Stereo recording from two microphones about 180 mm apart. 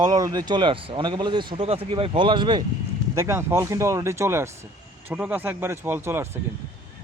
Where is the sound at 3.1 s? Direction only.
15° right (ahead or behind).